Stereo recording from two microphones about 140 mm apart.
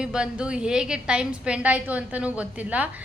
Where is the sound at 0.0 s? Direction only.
5° right (ahead or behind).